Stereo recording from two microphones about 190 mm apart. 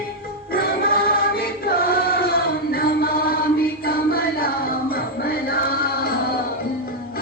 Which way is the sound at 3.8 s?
55° left (ahead or behind).